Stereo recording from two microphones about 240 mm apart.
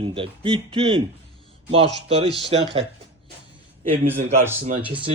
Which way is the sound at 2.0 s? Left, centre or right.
Right.